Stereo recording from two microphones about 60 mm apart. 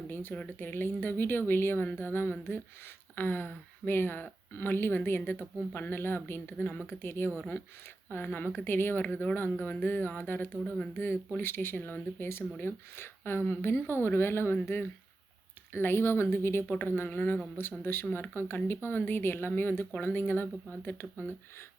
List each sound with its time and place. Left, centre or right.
0.1 s speech: left